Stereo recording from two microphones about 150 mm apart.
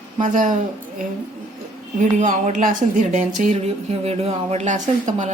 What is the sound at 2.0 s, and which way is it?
Speech, 55° right (ahead or behind).